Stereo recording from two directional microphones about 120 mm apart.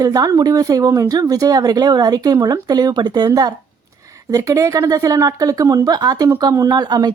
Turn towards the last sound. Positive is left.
turn(degrees=-35)  # may be behind; listen again after turning